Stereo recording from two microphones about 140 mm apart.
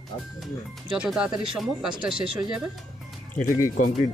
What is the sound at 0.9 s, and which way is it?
Speech, 5° right (ahead or behind).